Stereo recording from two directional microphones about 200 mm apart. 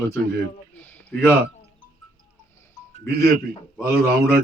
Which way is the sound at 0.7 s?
10° left (ahead or behind).